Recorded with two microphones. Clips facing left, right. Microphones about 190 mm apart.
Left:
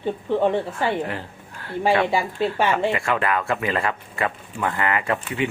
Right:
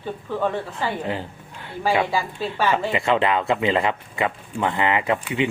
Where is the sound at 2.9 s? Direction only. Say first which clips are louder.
Right 2 dB; 20° right (ahead or behind).